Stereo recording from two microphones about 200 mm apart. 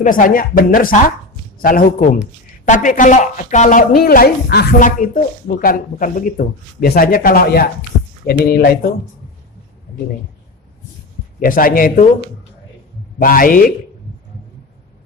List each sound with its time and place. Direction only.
0.0 s speech: 40° left (ahead or behind)
11.3 s speech: 45° left (ahead or behind)
13.1 s speech: 45° left (ahead or behind)